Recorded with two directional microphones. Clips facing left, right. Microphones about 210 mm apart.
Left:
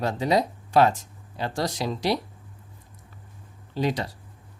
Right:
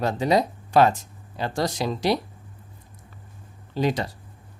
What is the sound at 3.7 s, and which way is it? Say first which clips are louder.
Speech: right 2 dB; 50° right (ahead or behind).